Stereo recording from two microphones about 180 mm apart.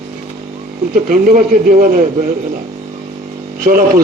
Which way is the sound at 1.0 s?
50° right (ahead or behind).